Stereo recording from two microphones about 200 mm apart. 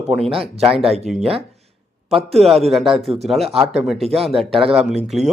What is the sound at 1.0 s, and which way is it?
Speech, centre (ahead or behind).